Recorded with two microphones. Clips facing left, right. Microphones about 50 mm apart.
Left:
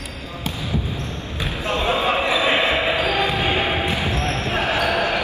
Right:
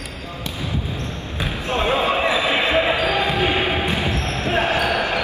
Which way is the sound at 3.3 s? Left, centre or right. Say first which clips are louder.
Right 1 dB; right.